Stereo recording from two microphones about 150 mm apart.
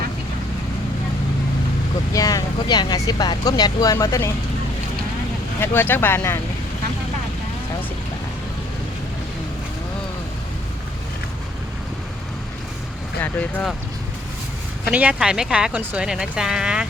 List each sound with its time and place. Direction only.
2.1 s speech: 25° left (ahead or behind)
5.5 s speech: 15° left (ahead or behind)
13.2 s speech: 10° left (ahead or behind)
14.8 s speech: 10° right (ahead or behind)